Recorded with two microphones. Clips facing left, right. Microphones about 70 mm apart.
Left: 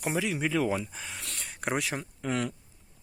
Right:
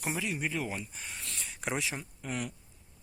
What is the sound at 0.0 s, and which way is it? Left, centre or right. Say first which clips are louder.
Speech: left 5 dB; left.